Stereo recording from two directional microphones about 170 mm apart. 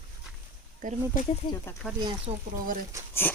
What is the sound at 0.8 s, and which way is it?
Speech, 50° right (ahead or behind).